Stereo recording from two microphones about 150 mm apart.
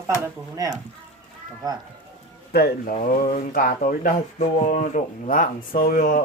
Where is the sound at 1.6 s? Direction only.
25° right (ahead or behind).